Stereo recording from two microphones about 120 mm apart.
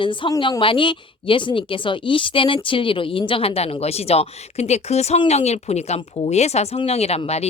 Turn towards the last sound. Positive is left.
turn(degrees=60)  # may be behind; listen again after turning